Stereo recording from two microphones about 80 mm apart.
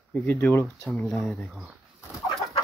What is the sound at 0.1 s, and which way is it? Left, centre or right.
Speech, left.